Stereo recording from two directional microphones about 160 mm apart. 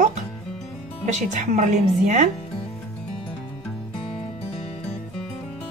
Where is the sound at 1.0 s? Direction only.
45° right (ahead or behind).